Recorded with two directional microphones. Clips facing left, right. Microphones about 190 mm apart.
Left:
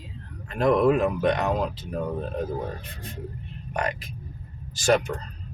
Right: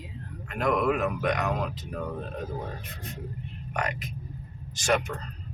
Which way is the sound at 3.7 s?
30° left (ahead or behind).